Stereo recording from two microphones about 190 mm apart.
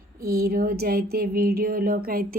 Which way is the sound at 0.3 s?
50° right (ahead or behind).